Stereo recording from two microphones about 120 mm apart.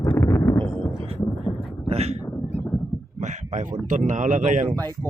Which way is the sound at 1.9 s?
60° right (ahead or behind).